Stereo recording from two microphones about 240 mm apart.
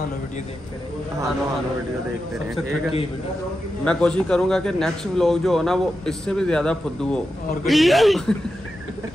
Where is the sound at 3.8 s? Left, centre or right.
Centre.